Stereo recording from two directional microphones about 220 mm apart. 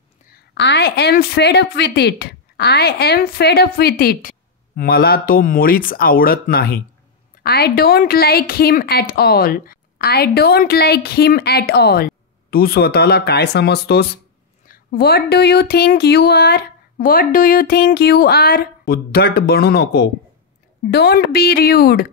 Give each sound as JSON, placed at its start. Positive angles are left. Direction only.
{"t": 0.3, "sound": "a woman's voice", "side_deg": 50}